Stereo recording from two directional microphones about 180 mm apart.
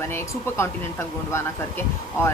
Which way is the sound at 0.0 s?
15° left (ahead or behind).